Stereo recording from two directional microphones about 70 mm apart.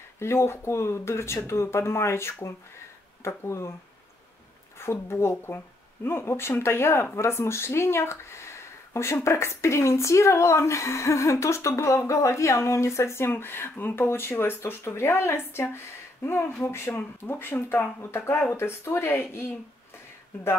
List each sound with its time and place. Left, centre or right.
0.2 s speech: left
4.7 s speech: left